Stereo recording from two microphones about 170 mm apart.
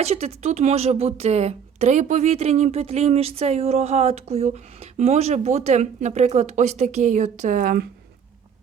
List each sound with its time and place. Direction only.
0.0 s a woman's voice: 40° right (ahead or behind); by 7.9 s 55° right (ahead or behind)